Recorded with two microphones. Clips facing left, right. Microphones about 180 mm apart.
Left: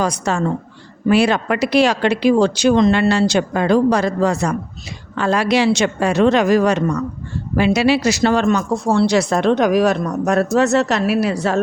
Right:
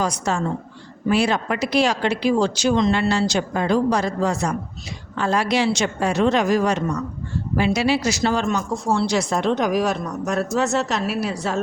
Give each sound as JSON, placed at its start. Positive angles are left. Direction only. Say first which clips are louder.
{"t": 0.0, "sound": "a woman's voice", "louder": "left 4 dB", "side_deg": 65}